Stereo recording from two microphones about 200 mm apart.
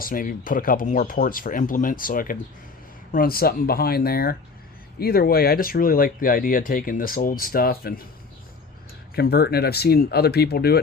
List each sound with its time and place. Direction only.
0.0 s speech: 45° left (ahead or behind)
9.1 s speech: 50° left (ahead or behind)